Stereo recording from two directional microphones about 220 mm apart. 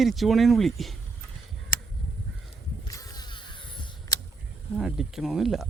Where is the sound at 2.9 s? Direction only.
15° left (ahead or behind).